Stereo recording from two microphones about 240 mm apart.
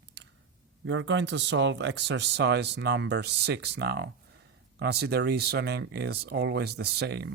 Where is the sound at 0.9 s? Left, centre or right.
Right.